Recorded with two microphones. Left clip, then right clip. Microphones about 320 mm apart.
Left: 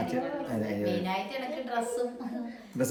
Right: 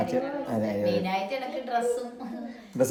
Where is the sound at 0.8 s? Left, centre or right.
Centre.